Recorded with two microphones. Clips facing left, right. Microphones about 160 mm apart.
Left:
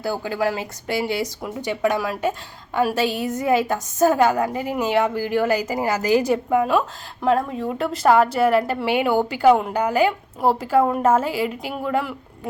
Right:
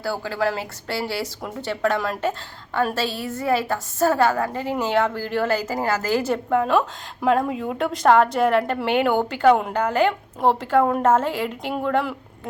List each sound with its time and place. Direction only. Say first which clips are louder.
0.0 s a woman's voice: left 1 dB; 15° left (ahead or behind)